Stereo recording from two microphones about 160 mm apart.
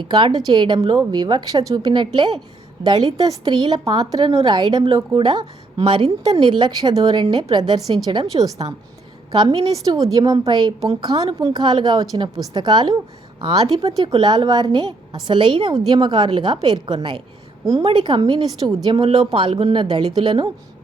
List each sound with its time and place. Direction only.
0.0 s a woman's voice: 30° right (ahead or behind)